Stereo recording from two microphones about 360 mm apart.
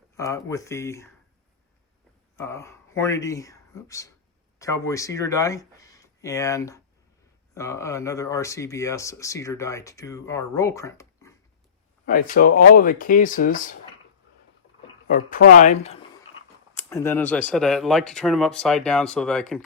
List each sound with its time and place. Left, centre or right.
0.2 s speech: centre
2.3 s speech: centre
12.0 s speech: left
15.0 s speech: left
16.7 s speech: centre